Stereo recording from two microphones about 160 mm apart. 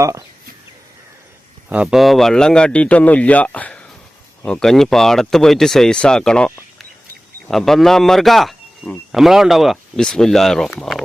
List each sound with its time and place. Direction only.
0.0 s speech: 20° right (ahead or behind)
1.7 s a man's voice: 5° right (ahead or behind)